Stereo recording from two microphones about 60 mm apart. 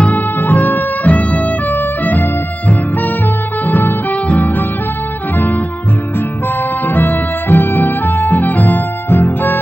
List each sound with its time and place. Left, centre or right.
0.0 s music: left
3.6 s music: left
6.9 s music: left